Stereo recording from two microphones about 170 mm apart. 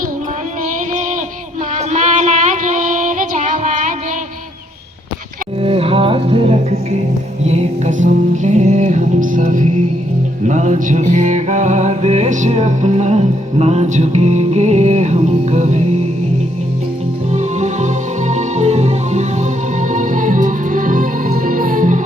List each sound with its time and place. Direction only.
1.7 s music: 45° right (ahead or behind)
5.6 s music: 35° right (ahead or behind)
17.3 s music: 45° right (ahead or behind)